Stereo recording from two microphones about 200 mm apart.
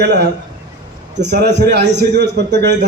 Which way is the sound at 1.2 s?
55° right (ahead or behind).